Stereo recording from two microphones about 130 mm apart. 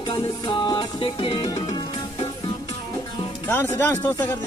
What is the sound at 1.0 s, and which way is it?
Music, 45° left (ahead or behind).